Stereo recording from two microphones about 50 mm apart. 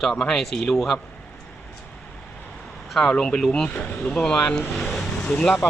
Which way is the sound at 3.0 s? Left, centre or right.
Centre.